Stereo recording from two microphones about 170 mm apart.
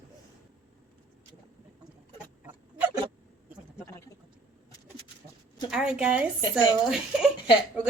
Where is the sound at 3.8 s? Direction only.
15° left (ahead or behind).